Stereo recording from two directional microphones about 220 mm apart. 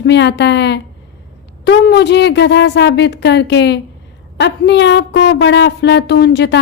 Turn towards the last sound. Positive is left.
turn(degrees=50)  # may be behind; listen again after turning